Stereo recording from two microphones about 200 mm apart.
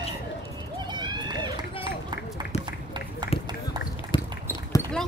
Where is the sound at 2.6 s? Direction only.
20° right (ahead or behind).